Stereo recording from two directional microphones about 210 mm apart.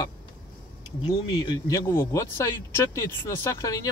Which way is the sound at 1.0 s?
20° left (ahead or behind).